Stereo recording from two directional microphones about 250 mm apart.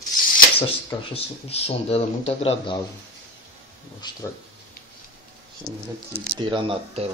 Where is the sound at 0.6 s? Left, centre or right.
Left.